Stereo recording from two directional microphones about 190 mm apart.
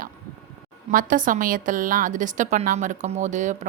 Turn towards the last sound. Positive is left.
turn(degrees=-40)  # may be behind; listen again after turning